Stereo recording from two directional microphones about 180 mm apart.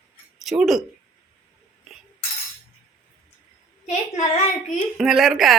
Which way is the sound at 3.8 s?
40° left (ahead or behind).